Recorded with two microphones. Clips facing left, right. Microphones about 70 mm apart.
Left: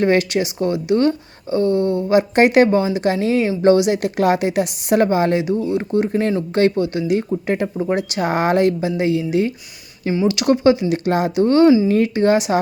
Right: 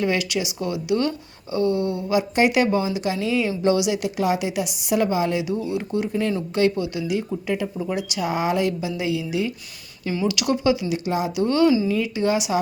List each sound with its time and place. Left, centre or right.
0.0 s speech: left
10.1 s speech: left
11.3 s speech: left
11.9 s speech: left